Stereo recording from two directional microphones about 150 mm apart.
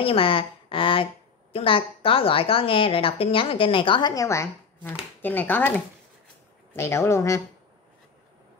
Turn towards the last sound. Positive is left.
turn(degrees=20)  # may be behind; listen again after turning